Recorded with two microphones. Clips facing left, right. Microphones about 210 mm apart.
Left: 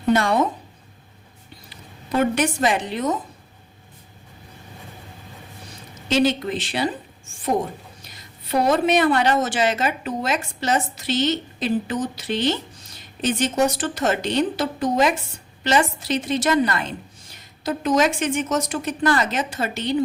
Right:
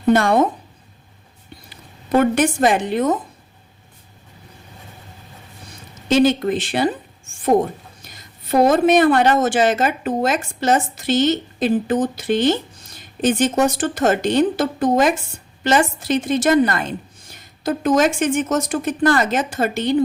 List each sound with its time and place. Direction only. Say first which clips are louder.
0.1 s a woman's voice: right 4 dB; 50° right (ahead or behind)
2.1 s a woman's voice: right 5 dB; 50° right (ahead or behind)
6.1 s a woman's voice: right 5 dB; 50° right (ahead or behind)
8.1 s a woman's voice: right 5 dB; 45° right (ahead or behind)